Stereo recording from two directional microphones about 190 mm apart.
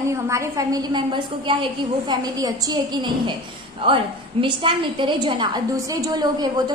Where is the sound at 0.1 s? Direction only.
15° right (ahead or behind).